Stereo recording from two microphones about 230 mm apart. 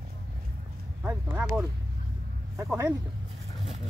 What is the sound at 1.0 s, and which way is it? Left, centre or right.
Speech, centre.